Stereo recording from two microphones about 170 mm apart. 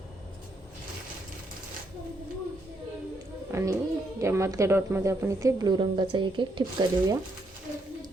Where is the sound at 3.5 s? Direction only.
15° right (ahead or behind).